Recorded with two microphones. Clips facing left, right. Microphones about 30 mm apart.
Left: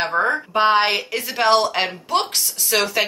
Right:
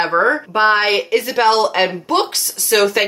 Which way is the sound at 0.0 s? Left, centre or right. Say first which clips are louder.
Right 5 dB; right.